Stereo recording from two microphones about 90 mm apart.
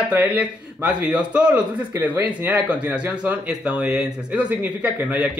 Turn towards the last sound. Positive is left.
turn(degrees=-15)  # may be behind; listen again after turning